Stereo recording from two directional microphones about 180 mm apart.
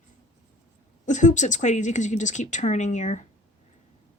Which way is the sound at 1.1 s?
45° left (ahead or behind).